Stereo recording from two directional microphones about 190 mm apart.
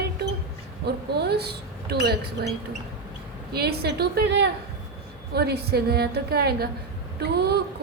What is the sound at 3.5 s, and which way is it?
Speech, 55° right (ahead or behind).